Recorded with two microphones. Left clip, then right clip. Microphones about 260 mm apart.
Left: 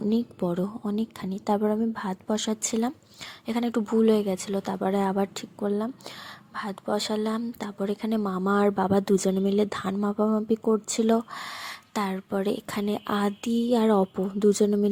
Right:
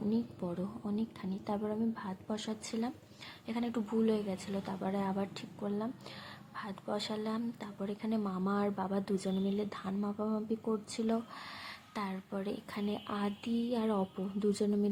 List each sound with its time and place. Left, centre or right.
0.1 s speech: left